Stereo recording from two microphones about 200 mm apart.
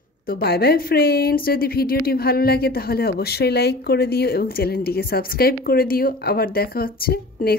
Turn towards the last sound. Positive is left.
turn(degrees=50)  # may be behind; listen again after turning